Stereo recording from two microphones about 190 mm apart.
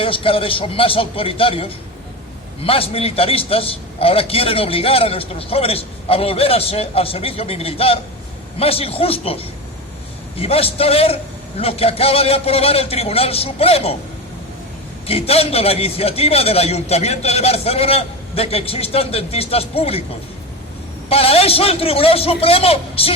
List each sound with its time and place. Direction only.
0.0 s a man's voice: 30° left (ahead or behind)
15.0 s a man's voice: 30° left (ahead or behind)
21.1 s a man's voice: 30° left (ahead or behind)